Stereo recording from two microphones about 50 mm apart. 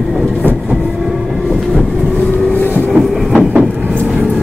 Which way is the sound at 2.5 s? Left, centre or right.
Left.